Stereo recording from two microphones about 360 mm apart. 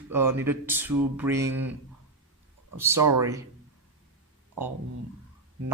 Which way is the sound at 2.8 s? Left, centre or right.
Centre.